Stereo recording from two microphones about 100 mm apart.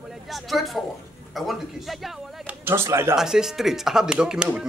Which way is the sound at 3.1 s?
5° right (ahead or behind).